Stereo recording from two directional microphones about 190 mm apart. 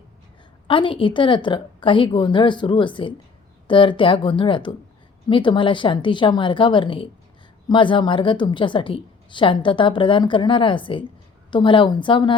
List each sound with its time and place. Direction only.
0.7 s a woman's voice: 25° left (ahead or behind)